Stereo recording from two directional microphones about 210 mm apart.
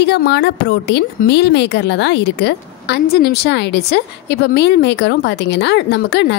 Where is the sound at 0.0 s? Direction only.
50° left (ahead or behind).